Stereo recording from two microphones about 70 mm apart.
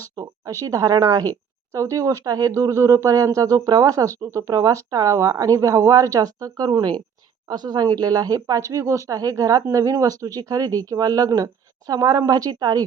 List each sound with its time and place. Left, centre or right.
0.2 s speech: right
2.5 s speech: right
7.4 s speech: right